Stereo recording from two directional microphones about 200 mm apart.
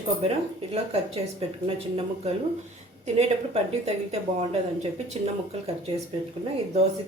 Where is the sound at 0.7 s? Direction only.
30° right (ahead or behind).